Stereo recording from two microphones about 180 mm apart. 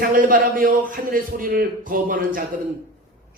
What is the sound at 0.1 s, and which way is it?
Speech, 50° right (ahead or behind).